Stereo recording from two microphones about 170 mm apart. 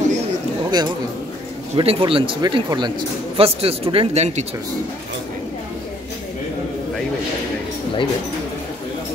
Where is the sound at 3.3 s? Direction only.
35° right (ahead or behind).